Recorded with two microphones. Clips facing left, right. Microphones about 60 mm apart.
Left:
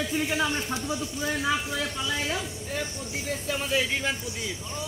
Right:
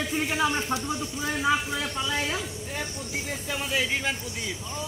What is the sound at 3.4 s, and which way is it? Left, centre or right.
Speech, centre.